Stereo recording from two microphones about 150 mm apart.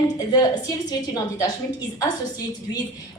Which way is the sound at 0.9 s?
25° left (ahead or behind).